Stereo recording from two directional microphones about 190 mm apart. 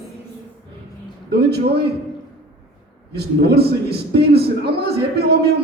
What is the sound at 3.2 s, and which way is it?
A man's voice, 55° right (ahead or behind).